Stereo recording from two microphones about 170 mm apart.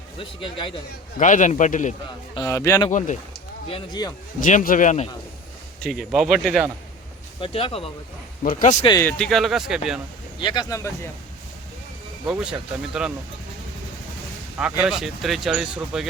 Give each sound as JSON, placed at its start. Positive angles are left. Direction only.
{"t": 0.2, "sound": "speech", "side_deg": 30}
{"t": 1.2, "sound": "a man's voice", "side_deg": 45}
{"t": 2.3, "sound": "speech", "side_deg": 20}
{"t": 3.7, "sound": "speech", "side_deg": 25}
{"t": 4.4, "sound": "a man's voice", "side_deg": 50}
{"t": 5.8, "sound": "speech", "side_deg": 0}
{"t": 7.4, "sound": "speech", "side_deg": 35}
{"t": 8.4, "sound": "a man's voice", "side_deg": 55}
{"t": 9.0, "sound": "speech", "side_deg": 10}
{"t": 10.4, "sound": "speech", "side_deg": 25}
{"t": 12.2, "sound": "speech", "side_deg": -5}
{"t": 14.6, "sound": "speech", "side_deg": -5}